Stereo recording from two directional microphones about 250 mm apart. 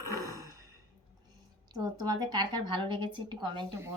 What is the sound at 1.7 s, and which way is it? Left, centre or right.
Speech, centre.